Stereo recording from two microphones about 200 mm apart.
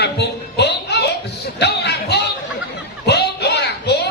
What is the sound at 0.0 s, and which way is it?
Music, 55° left (ahead or behind).